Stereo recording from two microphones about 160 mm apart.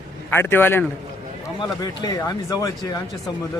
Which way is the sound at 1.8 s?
25° left (ahead or behind).